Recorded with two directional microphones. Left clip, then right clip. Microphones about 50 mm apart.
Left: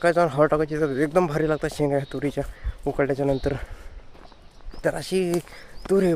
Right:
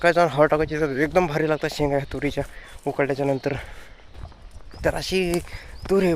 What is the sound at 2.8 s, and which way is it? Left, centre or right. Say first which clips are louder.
Speech: even; left.